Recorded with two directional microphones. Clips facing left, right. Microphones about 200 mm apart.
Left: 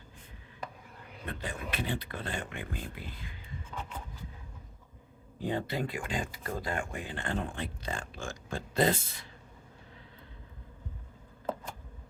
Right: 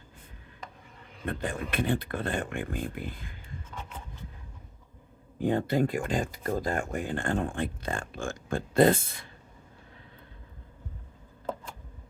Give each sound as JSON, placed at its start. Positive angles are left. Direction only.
{"t": 1.2, "sound": "speech", "side_deg": -50}
{"t": 5.4, "sound": "speech", "side_deg": -50}